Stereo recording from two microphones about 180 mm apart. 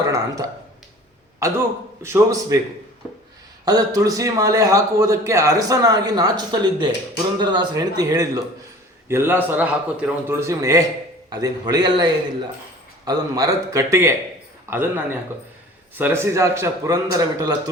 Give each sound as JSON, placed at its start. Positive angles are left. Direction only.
{"t": 0.0, "sound": "a sound", "side_deg": -20}
{"t": 1.4, "sound": "a man's voice", "side_deg": -15}
{"t": 3.7, "sound": "a man's voice", "side_deg": -20}